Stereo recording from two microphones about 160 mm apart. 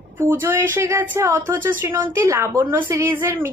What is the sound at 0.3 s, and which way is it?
A woman's voice, 15° right (ahead or behind).